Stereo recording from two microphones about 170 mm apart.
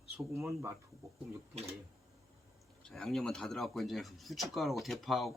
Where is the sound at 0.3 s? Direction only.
15° right (ahead or behind).